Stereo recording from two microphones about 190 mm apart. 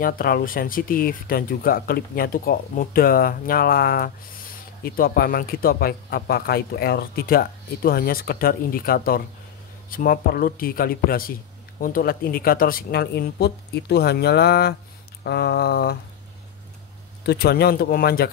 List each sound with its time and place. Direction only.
0.0 s speech: 50° left (ahead or behind)
17.2 s speech: 60° left (ahead or behind)